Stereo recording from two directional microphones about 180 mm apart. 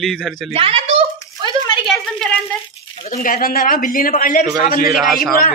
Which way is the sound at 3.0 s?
45° left (ahead or behind).